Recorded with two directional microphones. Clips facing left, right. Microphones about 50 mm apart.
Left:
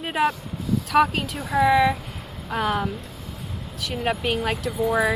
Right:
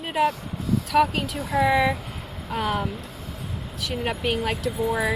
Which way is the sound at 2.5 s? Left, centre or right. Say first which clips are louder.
Left 2 dB; centre.